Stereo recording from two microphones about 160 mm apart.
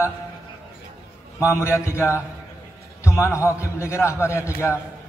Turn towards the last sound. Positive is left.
turn(degrees=15)  # may be behind; listen again after turning